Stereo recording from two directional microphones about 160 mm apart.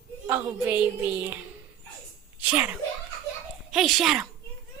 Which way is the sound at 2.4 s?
10° right (ahead or behind).